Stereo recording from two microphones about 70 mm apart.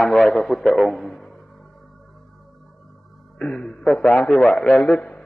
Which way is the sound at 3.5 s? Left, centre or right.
Centre.